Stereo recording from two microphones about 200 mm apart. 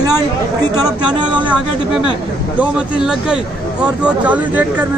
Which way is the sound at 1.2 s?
20° right (ahead or behind).